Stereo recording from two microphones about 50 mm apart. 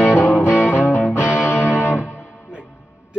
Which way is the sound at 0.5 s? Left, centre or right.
Right.